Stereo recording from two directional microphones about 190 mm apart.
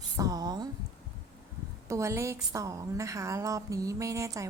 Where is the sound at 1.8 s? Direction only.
15° right (ahead or behind).